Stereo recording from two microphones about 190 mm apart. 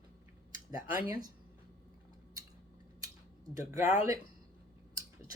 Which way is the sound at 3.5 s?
15° right (ahead or behind).